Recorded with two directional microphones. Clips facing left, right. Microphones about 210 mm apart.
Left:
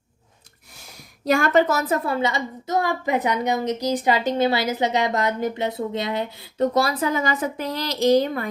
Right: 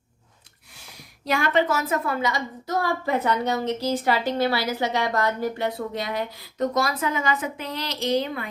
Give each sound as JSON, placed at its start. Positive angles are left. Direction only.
{"t": 1.2, "sound": "a woman's voice", "side_deg": 45}